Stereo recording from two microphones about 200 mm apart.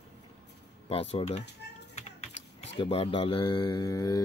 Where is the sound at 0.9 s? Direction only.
30° left (ahead or behind).